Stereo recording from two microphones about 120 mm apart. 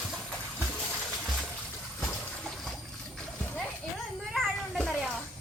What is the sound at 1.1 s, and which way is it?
Water, centre (ahead or behind).